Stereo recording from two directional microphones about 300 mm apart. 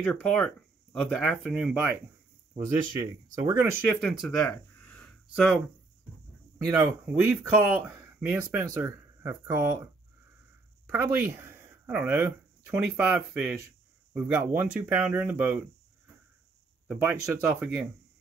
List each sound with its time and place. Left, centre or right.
0.0 s speech: centre
2.5 s speech: centre
6.7 s speech: centre
10.9 s speech: centre
16.8 s speech: centre